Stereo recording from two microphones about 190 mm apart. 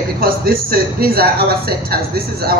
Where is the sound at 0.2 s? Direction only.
50° right (ahead or behind).